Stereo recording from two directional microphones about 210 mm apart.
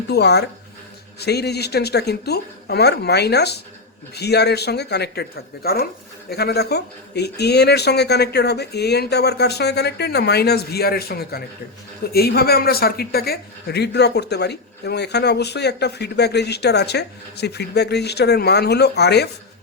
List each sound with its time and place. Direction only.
0.1 s speech: 50° left (ahead or behind)